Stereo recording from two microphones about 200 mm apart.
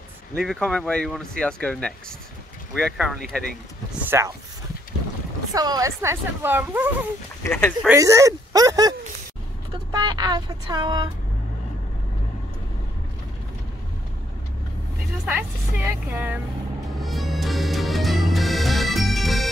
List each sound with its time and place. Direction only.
0.3 s speech: 5° left (ahead or behind)
4.1 s speech: 15° right (ahead or behind)
5.5 s speech: 20° right (ahead or behind)
7.4 s speech: 10° left (ahead or behind)
7.9 s speech: 15° right (ahead or behind)
15.2 s speech: 5° right (ahead or behind)
17.0 s music: centre (ahead or behind)